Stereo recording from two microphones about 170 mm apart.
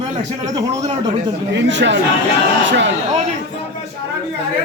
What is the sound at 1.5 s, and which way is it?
Speech, 90° right.